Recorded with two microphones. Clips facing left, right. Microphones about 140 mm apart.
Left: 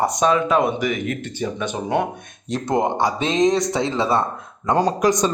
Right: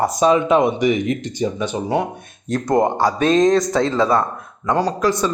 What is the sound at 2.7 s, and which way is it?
Speech, 20° left (ahead or behind).